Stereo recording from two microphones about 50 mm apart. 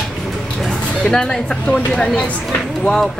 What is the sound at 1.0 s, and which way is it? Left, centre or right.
Speech, centre.